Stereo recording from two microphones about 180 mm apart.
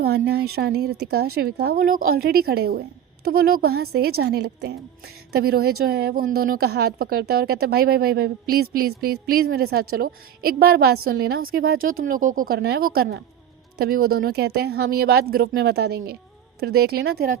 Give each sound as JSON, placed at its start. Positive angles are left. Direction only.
{"t": 0.0, "sound": "a woman's voice", "side_deg": -65}